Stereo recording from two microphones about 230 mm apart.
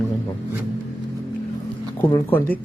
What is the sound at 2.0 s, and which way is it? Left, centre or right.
Speech, centre.